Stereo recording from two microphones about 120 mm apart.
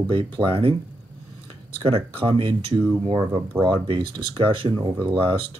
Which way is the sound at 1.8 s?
50° right (ahead or behind).